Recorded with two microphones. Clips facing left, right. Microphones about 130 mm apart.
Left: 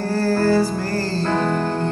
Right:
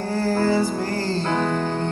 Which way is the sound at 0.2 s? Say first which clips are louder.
Left 3 dB; 20° right (ahead or behind).